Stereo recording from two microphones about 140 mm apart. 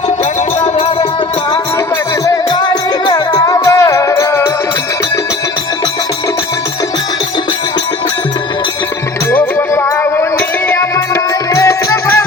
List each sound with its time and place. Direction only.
0.6 s music: 40° left (ahead or behind)
2.2 s music: 25° left (ahead or behind)
9.3 s music: 15° left (ahead or behind)